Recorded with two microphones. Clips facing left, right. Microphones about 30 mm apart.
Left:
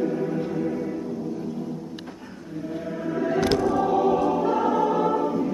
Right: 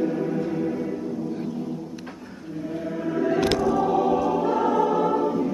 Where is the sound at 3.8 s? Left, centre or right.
Centre.